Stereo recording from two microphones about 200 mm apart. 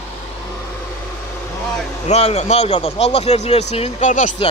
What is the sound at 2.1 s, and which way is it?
Speech, 30° left (ahead or behind).